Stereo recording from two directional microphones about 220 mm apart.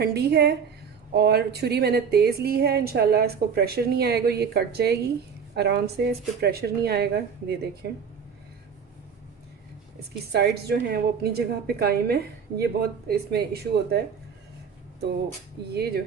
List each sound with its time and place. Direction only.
0.0 s a woman's voice: 45° right (ahead or behind)
10.3 s a woman's voice: 45° right (ahead or behind)
15.7 s a woman's voice: 45° right (ahead or behind)